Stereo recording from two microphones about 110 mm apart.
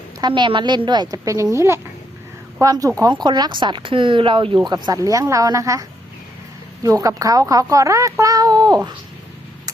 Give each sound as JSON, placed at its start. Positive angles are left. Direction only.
{"t": 0.2, "sound": "a woman's voice", "side_deg": -45}
{"t": 4.5, "sound": "a woman's voice", "side_deg": -35}
{"t": 6.8, "sound": "a woman's voice", "side_deg": -30}